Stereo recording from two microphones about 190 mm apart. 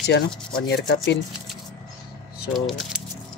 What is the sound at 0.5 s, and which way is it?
Speech, 60° left (ahead or behind).